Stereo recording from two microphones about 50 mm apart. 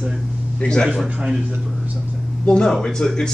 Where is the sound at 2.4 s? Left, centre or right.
Centre.